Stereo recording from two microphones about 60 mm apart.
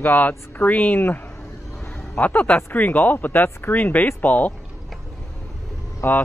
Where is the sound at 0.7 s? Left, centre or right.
Left.